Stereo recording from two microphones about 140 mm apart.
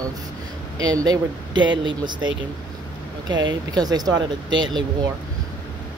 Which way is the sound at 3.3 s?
30° right (ahead or behind).